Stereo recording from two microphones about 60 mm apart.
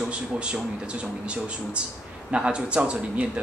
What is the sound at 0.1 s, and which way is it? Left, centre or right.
Speech, centre.